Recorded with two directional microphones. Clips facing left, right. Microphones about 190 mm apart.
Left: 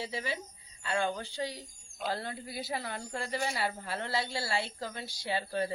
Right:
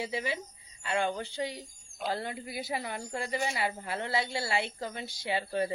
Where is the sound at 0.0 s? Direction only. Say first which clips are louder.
Right 3 dB; 20° right (ahead or behind).